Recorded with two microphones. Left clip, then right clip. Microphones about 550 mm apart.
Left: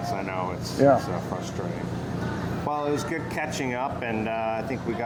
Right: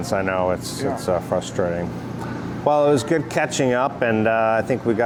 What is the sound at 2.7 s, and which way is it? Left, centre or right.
Speech, right.